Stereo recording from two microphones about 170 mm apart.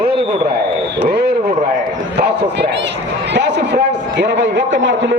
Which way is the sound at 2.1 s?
85° right.